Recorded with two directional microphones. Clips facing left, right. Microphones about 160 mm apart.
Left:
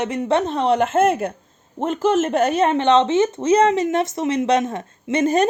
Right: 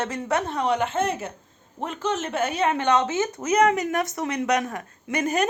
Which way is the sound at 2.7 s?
25° left (ahead or behind).